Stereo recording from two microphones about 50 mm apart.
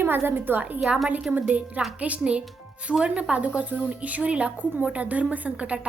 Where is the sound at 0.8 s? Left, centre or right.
Centre.